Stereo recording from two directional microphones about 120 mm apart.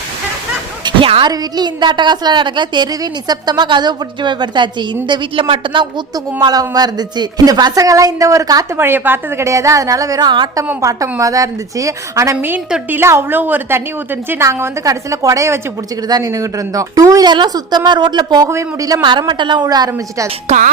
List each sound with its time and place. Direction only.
0.9 s a sound: 45° right (ahead or behind)
1.3 s a woman's voice: 35° right (ahead or behind)
8.8 s a woman's voice: 20° right (ahead or behind); by 10.6 s 40° right (ahead or behind)
10.8 s a woman's voice: 25° right (ahead or behind)
18.4 s a woman's voice: 25° right (ahead or behind)
19.0 s a woman's voice: 40° right (ahead or behind)
20.5 s a woman's voice: 65° right (ahead or behind)